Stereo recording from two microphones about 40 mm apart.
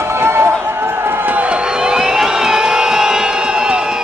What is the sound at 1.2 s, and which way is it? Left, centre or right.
Crowd, right.